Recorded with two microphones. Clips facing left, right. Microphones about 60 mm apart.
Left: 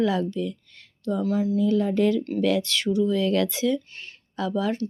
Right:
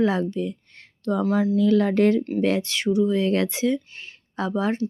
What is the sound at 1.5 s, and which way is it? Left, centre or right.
Speech, right.